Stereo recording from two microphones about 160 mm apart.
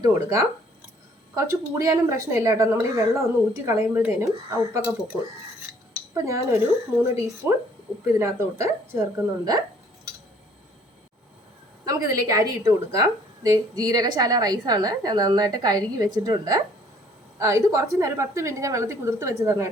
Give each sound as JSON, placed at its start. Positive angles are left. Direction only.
{"t": 0.0, "sound": "a woman's voice", "side_deg": -20}
{"t": 6.1, "sound": "a woman's voice", "side_deg": -20}
{"t": 11.9, "sound": "a woman's voice", "side_deg": -25}